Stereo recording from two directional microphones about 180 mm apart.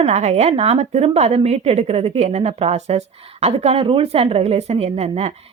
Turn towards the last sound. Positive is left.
turn(degrees=-35)  # may be behind; listen again after turning